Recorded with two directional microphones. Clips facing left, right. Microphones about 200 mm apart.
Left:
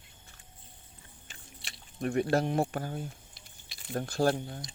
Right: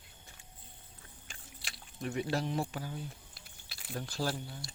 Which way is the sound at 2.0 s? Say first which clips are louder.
Left 7 dB; 50° left (ahead or behind).